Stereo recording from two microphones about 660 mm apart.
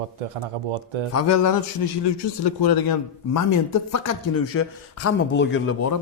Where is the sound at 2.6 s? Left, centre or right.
Left.